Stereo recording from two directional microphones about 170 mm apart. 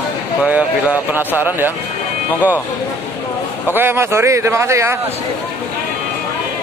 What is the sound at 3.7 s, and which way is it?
A man's voice, 15° right (ahead or behind).